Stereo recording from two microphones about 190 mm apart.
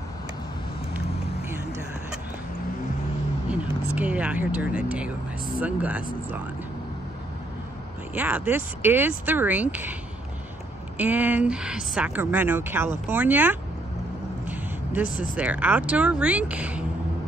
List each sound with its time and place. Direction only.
3.9 s speech: 5° right (ahead or behind)
8.1 s speech: 10° right (ahead or behind)
11.0 s speech: 10° right (ahead or behind)
14.5 s vehicle: 10° right (ahead or behind)
15.0 s speech: 45° left (ahead or behind)
15.3 s speech: 5° right (ahead or behind)